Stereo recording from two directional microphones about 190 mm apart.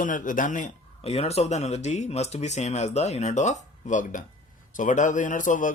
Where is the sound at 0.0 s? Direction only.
45° left (ahead or behind).